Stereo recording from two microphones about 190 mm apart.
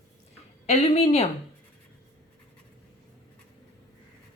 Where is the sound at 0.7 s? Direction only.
30° left (ahead or behind).